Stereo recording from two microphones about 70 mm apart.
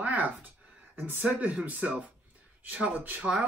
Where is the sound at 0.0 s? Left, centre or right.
Right.